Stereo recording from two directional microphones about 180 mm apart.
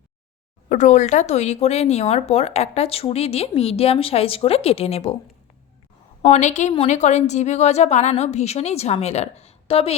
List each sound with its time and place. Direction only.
0.7 s speech: 40° left (ahead or behind)
6.2 s speech: 40° left (ahead or behind)